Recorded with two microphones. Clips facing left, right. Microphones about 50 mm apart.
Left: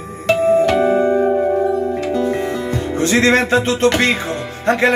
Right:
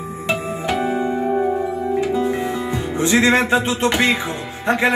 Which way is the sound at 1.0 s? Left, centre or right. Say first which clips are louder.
Left 6 dB; left.